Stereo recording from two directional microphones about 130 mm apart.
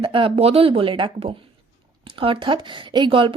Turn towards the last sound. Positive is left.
turn(degrees=-40)  # may be behind; listen again after turning